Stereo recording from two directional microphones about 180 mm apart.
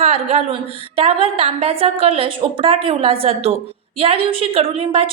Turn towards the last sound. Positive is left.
turn(degrees=-30)  # may be behind; listen again after turning